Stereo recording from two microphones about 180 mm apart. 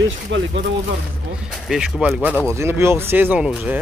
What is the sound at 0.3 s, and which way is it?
Speech, 90° right.